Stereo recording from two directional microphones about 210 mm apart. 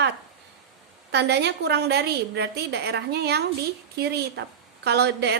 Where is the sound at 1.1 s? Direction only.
55° right (ahead or behind).